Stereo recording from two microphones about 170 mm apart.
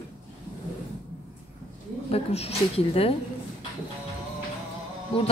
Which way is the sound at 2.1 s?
35° left (ahead or behind).